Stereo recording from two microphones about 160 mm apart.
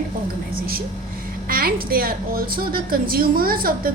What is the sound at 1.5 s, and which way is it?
A woman's voice, 65° right (ahead or behind).